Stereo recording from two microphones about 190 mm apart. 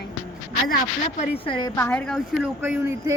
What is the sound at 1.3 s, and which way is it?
Speech, 25° left (ahead or behind).